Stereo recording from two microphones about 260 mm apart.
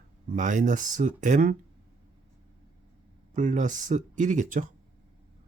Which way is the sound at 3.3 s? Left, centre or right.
Right.